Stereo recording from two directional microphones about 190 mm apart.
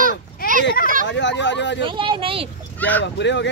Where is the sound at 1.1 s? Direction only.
70° left (ahead or behind).